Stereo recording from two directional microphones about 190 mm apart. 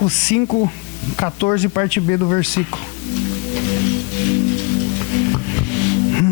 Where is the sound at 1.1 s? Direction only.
20° left (ahead or behind).